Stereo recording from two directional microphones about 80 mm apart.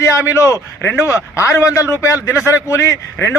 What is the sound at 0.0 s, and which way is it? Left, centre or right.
Speech, left.